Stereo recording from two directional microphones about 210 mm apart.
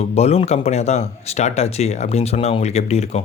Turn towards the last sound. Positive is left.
turn(degrees=30)  # may be behind; listen again after turning